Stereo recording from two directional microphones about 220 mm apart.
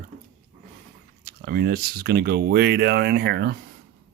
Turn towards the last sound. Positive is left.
turn(degrees=-45)  # may be behind; listen again after turning